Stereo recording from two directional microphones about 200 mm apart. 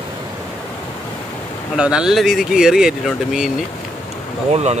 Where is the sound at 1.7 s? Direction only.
5° right (ahead or behind).